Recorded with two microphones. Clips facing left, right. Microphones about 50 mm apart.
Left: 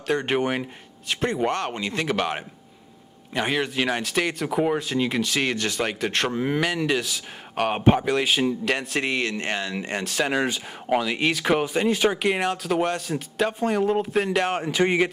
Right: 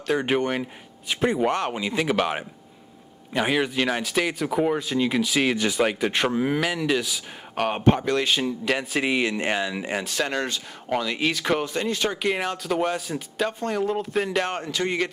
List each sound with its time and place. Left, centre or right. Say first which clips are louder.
0.0 s speech: even; centre
1.0 s speech: right 2 dB; centre
14.7 s speech: left 4 dB; left